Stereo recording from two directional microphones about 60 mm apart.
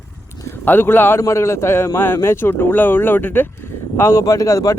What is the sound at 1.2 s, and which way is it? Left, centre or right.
Speech, left.